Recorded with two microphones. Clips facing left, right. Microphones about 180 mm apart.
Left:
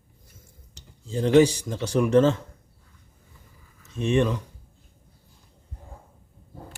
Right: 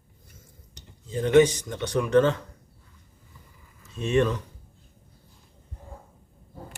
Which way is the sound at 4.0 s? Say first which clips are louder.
Left 1 dB; 15° left (ahead or behind).